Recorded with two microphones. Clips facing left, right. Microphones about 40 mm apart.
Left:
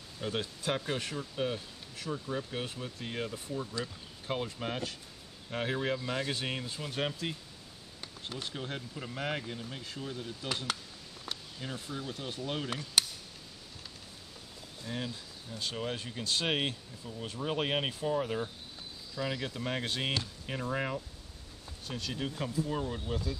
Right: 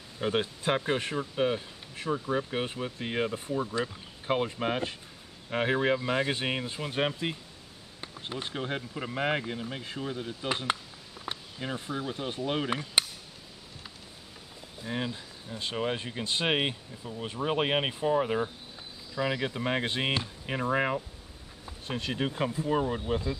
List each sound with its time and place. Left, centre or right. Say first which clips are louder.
0.2 s speech: right 6 dB; right
14.8 s speech: right 5 dB; right